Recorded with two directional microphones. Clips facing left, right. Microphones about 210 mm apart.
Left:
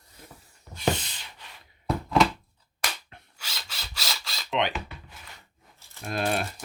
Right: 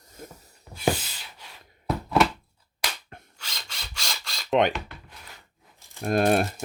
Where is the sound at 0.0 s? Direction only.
45° right (ahead or behind).